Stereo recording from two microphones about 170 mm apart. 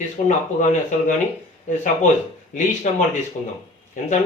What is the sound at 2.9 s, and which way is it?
Speech, 45° left (ahead or behind).